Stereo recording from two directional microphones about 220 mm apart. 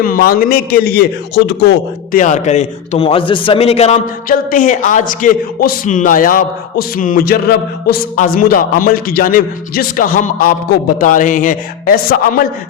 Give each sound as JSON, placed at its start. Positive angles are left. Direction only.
{"t": 0.0, "sound": "a man's voice", "side_deg": 40}
{"t": 2.1, "sound": "a man's voice", "side_deg": 35}